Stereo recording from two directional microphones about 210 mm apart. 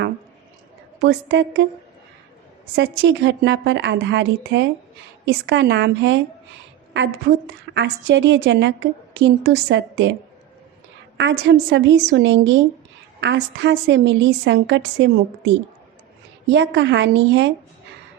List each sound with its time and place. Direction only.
1.0 s a woman's voice: 55° right (ahead or behind)
2.7 s a woman's voice: 55° right (ahead or behind)
11.2 s a woman's voice: 55° right (ahead or behind)